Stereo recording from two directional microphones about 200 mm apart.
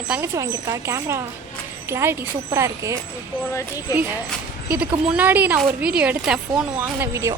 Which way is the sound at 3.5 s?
15° left (ahead or behind).